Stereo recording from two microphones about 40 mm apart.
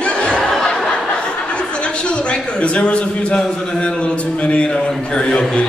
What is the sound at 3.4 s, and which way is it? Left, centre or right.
Speech, left.